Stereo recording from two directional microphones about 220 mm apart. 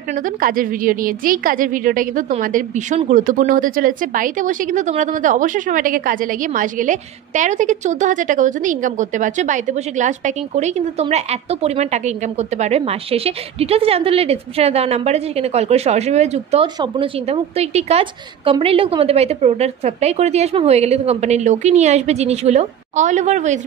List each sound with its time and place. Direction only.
0.1 s a woman's voice: 40° right (ahead or behind)